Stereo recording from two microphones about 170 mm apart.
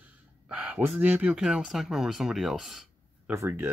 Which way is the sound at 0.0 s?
5° right (ahead or behind).